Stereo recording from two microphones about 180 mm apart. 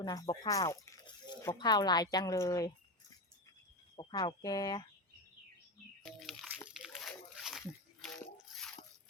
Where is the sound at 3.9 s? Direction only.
25° left (ahead or behind).